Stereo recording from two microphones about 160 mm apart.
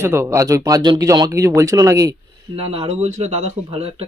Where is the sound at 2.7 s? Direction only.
40° right (ahead or behind).